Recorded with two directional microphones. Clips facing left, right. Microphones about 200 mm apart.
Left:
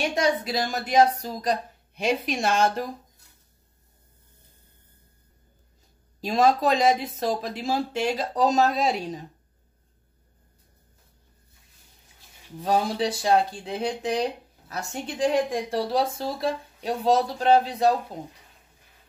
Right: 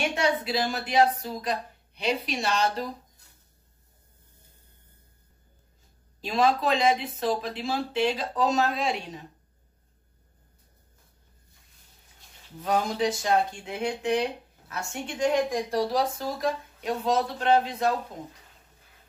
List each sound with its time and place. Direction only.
0.1 s a woman's voice: 40° left (ahead or behind)
6.2 s speech: 45° left (ahead or behind)
12.6 s speech: 35° left (ahead or behind)